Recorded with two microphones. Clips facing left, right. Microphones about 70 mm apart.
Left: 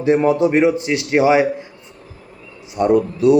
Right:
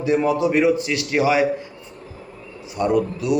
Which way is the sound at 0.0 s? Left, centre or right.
Left.